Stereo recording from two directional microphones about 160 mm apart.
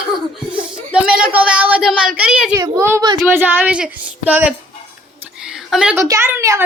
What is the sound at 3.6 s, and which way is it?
Speech, 5° right (ahead or behind).